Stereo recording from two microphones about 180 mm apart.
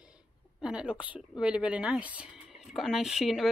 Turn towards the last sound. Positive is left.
turn(degrees=0)  # may be behind; listen again after turning